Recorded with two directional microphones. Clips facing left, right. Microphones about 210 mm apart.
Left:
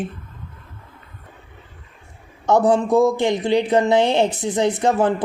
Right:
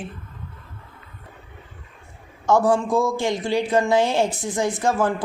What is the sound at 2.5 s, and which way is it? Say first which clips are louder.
Speech: left 3 dB; 20° left (ahead or behind).